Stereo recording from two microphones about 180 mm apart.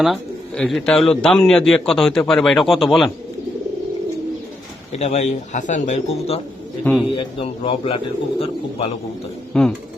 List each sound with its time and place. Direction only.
0.0 s a man's voice: centre (ahead or behind)
4.9 s speech: 40° left (ahead or behind)
9.5 s speech: 5° left (ahead or behind)